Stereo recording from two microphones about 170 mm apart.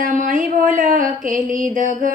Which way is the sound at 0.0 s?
50° right (ahead or behind).